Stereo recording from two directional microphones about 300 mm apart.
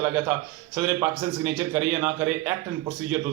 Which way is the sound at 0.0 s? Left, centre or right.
Centre.